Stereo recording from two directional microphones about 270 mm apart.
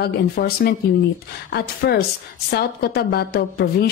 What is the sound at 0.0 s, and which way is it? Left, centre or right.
A woman's voice, left.